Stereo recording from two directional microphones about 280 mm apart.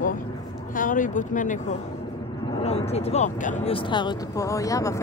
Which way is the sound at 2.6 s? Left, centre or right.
Left.